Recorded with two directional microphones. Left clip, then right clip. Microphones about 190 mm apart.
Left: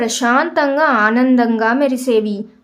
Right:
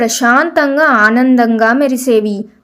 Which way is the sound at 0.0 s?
20° right (ahead or behind).